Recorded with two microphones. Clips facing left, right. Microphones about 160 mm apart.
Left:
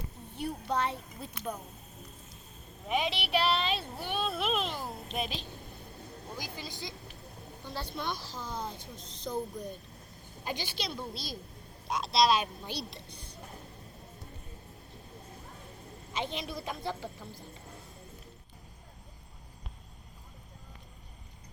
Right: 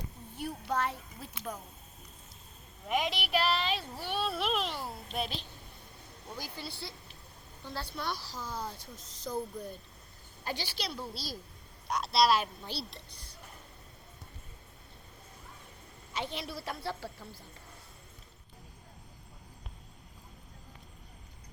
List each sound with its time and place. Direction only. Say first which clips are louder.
0.3 s a sound: left 1 dB; 25° left (ahead or behind)
2.9 s a woman's voice: left 1 dB; 25° left (ahead or behind)
16.1 s a woman's voice: left 2 dB; 20° left (ahead or behind)